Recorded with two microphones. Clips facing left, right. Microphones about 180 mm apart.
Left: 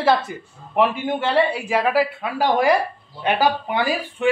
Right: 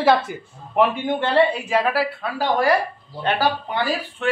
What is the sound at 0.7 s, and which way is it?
Speech, 5° left (ahead or behind).